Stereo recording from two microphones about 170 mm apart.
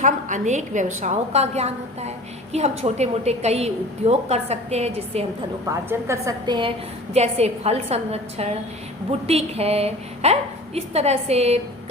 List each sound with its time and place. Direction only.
0.0 s a woman's voice: 45° right (ahead or behind)
5.6 s a woman's voice: 20° right (ahead or behind); by 11.6 s 40° right (ahead or behind)